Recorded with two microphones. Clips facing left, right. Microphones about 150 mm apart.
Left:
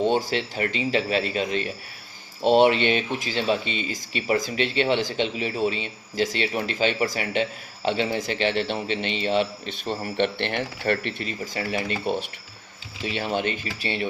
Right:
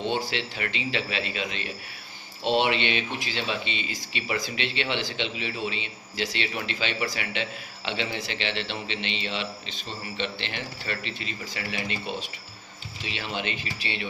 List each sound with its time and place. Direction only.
0.0 s speech: 45° left (ahead or behind)